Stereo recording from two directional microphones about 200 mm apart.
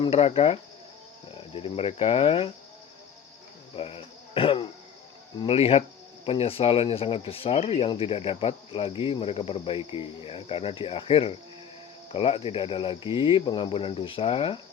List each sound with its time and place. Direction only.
0.0 s speech: 30° left (ahead or behind)
3.8 s speech: 30° left (ahead or behind)